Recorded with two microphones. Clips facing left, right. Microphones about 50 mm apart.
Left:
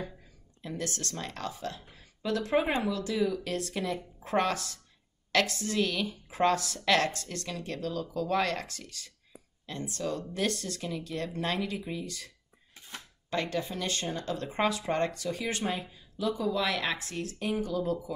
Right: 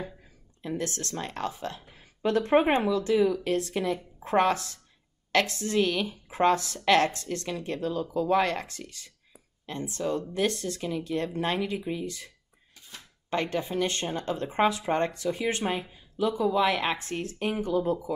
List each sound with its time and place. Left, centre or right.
0.6 s speech: right
13.3 s speech: right